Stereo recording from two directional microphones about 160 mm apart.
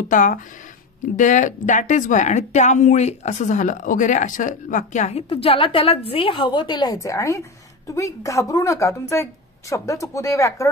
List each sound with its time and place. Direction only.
0.1 s speech: 55° left (ahead or behind); by 10.7 s 20° left (ahead or behind)